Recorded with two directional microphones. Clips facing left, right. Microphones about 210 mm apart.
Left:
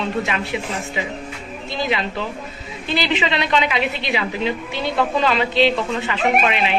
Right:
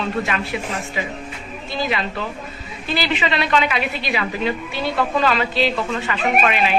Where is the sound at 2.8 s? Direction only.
20° left (ahead or behind).